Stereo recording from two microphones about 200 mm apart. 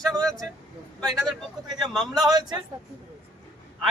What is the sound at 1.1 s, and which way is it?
A man's voice, centre (ahead or behind).